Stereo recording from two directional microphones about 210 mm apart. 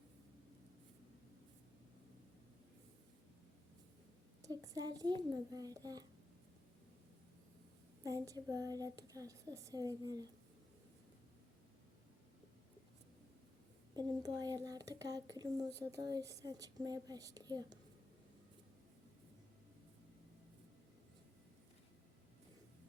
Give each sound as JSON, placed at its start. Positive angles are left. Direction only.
{"t": 4.4, "sound": "a child's voice", "side_deg": -15}
{"t": 8.0, "sound": "speech", "side_deg": -15}
{"t": 13.9, "sound": "speech", "side_deg": -20}